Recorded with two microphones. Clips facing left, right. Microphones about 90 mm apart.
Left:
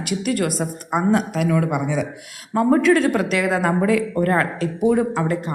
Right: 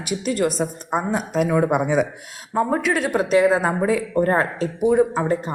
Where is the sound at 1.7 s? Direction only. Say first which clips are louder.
Right 3 dB; 50° right (ahead or behind).